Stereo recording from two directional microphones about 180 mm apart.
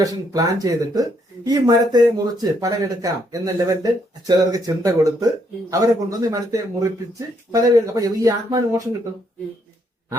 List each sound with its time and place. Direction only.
0.0 s speech: 20° right (ahead or behind)